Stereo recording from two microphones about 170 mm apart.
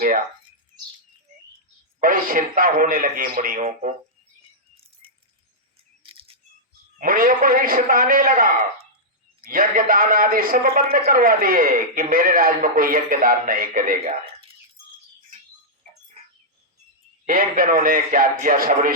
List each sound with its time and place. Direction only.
2.0 s a man's voice: 55° right (ahead or behind)
6.0 s a sound: 30° right (ahead or behind)
7.0 s a man's voice: 55° right (ahead or behind)
14.0 s speech: 40° right (ahead or behind)
17.2 s a man's voice: 55° right (ahead or behind)